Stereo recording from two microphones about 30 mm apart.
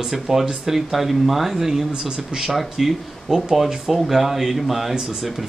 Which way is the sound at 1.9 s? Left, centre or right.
Right.